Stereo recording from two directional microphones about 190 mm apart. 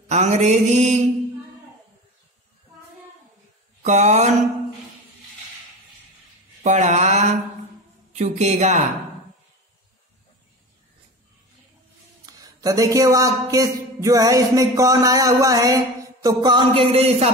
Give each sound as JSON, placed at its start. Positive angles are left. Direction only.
{"t": 0.1, "sound": "mantra", "side_deg": -35}
{"t": 3.8, "sound": "mantra", "side_deg": -40}
{"t": 6.6, "sound": "speech", "side_deg": -40}
{"t": 8.1, "sound": "mantra", "side_deg": -35}
{"t": 12.3, "sound": "speech", "side_deg": -20}